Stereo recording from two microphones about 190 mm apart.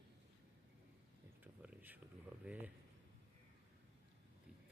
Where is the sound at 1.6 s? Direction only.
10° right (ahead or behind).